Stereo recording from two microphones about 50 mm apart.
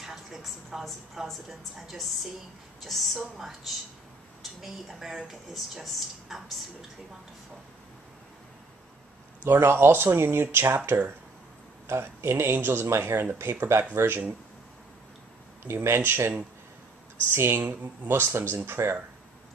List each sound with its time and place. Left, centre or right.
0.0 s a woman's voice: centre
9.4 s speech: right
10.9 s speech: right
11.9 s speech: right
15.6 s speech: right